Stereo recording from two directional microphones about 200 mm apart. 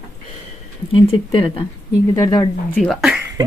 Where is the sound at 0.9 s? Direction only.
25° left (ahead or behind).